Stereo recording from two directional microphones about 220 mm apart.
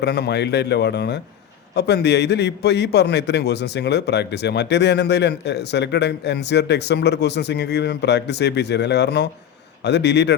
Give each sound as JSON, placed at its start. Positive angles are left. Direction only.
{"t": 0.0, "sound": "a man's voice", "side_deg": 50}